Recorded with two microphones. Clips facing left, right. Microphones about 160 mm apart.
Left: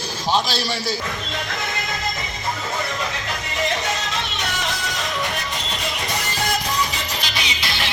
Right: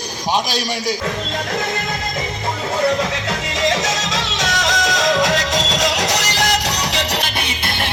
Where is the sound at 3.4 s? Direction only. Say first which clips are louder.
Right 4 dB; 90° right.